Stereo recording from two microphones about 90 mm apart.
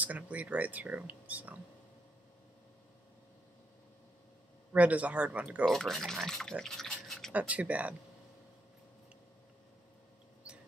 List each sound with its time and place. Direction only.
0.0 s speech: 15° right (ahead or behind)
4.7 s speech: 15° right (ahead or behind)
5.7 s speech: centre (ahead or behind)
7.3 s speech: 15° right (ahead or behind)